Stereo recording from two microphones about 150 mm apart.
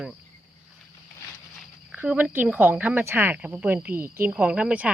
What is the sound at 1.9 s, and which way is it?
Speech, 10° right (ahead or behind).